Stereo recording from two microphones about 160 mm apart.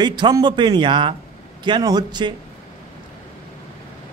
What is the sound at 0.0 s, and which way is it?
A man's voice, 25° right (ahead or behind).